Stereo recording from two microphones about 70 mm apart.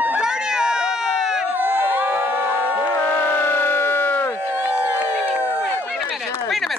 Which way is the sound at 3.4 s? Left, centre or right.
Left.